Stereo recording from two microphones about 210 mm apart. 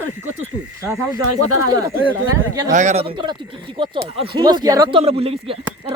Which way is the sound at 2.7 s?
30° right (ahead or behind).